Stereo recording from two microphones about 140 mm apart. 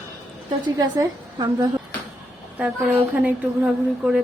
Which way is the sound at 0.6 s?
30° right (ahead or behind).